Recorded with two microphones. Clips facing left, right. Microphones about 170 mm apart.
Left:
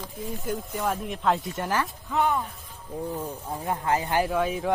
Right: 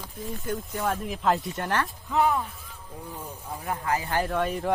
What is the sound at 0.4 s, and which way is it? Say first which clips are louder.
Speech: even; 5° left (ahead or behind).